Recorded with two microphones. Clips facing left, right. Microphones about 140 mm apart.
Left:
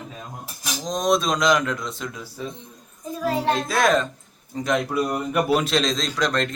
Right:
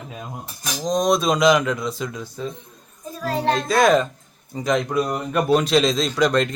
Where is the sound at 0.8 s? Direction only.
Centre (ahead or behind).